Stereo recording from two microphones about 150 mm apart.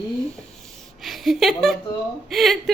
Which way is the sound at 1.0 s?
Centre (ahead or behind).